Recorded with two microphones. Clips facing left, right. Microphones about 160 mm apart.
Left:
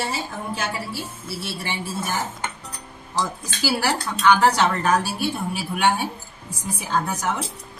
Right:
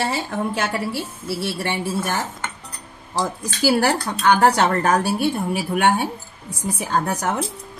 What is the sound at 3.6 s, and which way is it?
Speech, 50° right (ahead or behind).